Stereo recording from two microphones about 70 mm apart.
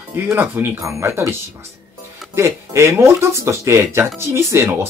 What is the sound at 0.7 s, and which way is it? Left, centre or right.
Speech, right.